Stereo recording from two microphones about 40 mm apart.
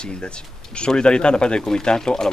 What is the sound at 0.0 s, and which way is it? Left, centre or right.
Speech, left.